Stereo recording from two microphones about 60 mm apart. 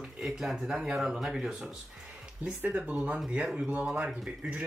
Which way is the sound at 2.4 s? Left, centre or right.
Right.